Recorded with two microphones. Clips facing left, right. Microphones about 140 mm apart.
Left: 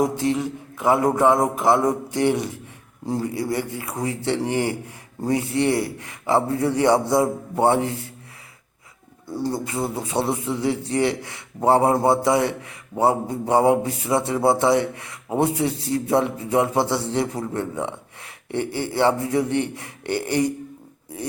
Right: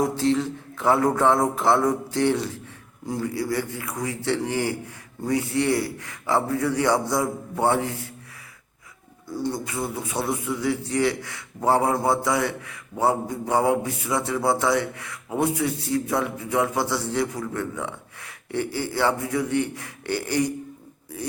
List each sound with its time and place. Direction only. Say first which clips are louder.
0.0 s a man's voice: left 1 dB; 15° left (ahead or behind)
9.2 s a man's voice: left 2 dB; 25° left (ahead or behind)
21.1 s a sound: left 1 dB; 25° left (ahead or behind)